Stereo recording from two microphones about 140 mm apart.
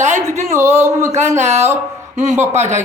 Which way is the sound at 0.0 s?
60° right (ahead or behind).